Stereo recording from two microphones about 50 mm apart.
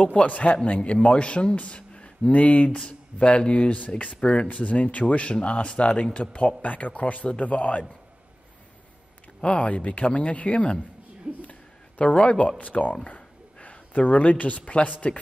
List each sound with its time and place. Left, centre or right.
0.0 s speech: left
9.4 s speech: left
11.3 s speech: right
12.0 s speech: left
13.0 s a sound: left